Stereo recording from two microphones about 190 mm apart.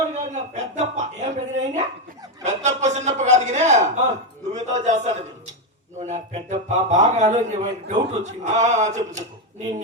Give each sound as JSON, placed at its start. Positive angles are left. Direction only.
{"t": 0.1, "sound": "speech", "side_deg": -40}